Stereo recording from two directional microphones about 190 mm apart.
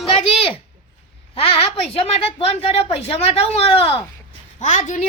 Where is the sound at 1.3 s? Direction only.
30° left (ahead or behind).